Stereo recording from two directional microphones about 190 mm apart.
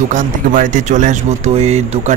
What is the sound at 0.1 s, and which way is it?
Speech, 45° right (ahead or behind).